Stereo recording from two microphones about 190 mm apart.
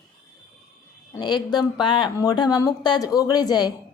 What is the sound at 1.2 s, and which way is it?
A woman's voice, 20° left (ahead or behind).